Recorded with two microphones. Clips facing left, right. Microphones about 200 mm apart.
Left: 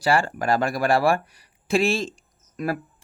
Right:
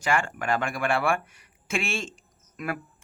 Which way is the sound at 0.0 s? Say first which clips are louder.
Left 5 dB; 35° left (ahead or behind).